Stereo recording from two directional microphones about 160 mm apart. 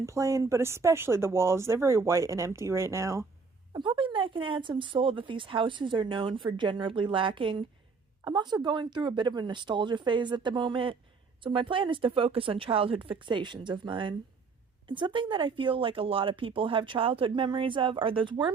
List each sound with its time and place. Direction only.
0.0 s speech: 20° right (ahead or behind)
3.7 s speech: 30° right (ahead or behind)